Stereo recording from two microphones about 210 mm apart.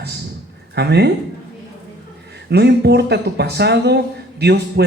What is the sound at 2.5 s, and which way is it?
Speech, 50° right (ahead or behind).